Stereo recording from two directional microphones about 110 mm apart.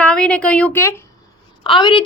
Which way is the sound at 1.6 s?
50° left (ahead or behind).